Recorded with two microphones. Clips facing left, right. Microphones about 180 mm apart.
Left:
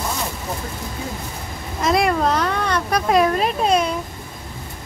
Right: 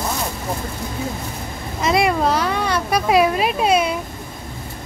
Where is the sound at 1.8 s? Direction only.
Centre (ahead or behind).